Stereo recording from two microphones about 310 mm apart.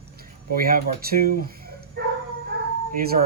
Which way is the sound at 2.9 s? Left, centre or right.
Right.